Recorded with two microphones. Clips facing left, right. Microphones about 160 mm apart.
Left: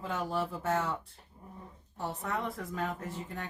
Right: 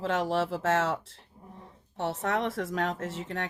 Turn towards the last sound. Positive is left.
turn(degrees=-90)